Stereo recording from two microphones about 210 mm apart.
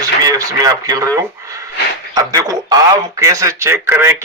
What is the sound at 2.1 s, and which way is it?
Speech, 15° right (ahead or behind).